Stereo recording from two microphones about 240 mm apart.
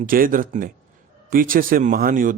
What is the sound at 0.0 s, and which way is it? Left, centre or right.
A man's voice, right.